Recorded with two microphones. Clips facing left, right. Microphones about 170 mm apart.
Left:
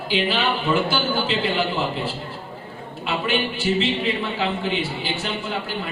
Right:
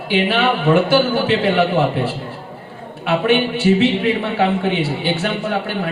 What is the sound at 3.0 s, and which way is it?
A man's voice, 65° right (ahead or behind).